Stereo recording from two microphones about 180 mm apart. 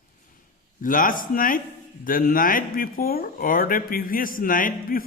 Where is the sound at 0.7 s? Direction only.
50° left (ahead or behind).